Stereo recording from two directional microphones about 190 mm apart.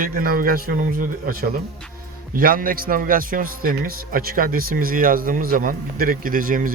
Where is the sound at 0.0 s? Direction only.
50° right (ahead or behind).